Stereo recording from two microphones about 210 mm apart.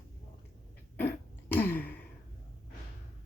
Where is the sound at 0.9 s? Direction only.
10° left (ahead or behind).